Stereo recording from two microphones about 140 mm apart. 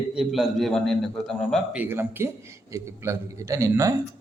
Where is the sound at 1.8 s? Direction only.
15° right (ahead or behind).